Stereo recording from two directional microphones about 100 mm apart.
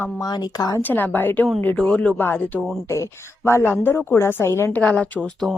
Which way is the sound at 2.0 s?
20° left (ahead or behind).